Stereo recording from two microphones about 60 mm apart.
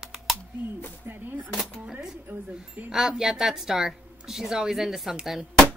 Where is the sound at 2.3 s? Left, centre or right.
Right.